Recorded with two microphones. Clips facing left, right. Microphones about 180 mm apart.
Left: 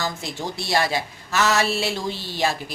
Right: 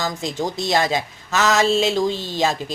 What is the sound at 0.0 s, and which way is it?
Speech, 20° right (ahead or behind).